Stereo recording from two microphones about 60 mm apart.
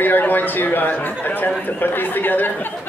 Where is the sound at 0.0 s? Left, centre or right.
Left.